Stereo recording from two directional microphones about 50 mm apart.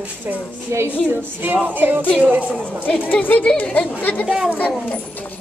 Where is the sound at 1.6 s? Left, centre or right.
Right.